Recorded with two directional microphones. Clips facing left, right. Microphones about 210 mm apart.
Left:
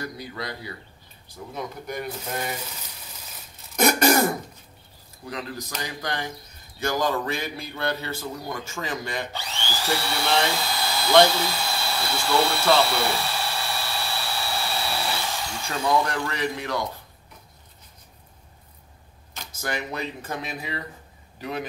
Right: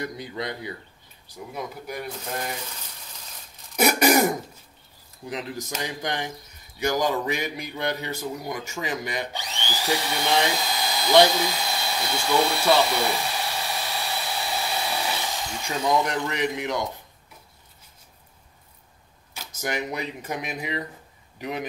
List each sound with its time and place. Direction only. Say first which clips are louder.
0.0 s speech: right 2 dB; 20° right (ahead or behind)
1.5 s speech: left 1 dB; 5° right (ahead or behind)
2.0 s speech: left 1 dB; 5° left (ahead or behind)
3.7 s throat clearing: even; 10° right (ahead or behind)
5.2 s speech: right 1 dB; 20° right (ahead or behind)
19.6 s speech: right 1 dB; 15° right (ahead or behind)